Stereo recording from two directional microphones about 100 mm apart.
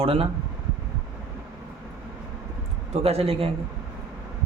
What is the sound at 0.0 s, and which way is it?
Speech, 75° right (ahead or behind).